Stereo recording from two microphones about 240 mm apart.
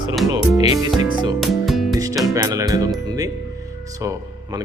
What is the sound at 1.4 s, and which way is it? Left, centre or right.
Music, centre.